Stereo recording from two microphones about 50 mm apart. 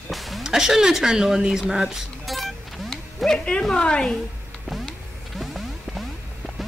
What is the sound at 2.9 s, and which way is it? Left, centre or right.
Speech, centre.